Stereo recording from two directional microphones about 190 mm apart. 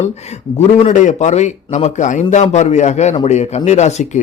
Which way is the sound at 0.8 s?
40° left (ahead or behind).